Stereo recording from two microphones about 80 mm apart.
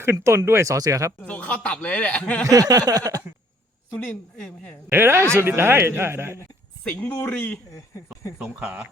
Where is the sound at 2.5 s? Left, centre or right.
Right.